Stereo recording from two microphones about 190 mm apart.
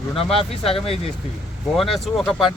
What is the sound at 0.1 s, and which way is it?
Speech, 30° left (ahead or behind).